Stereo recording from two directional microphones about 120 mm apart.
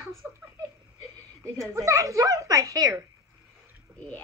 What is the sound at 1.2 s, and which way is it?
A woman's voice, 25° right (ahead or behind).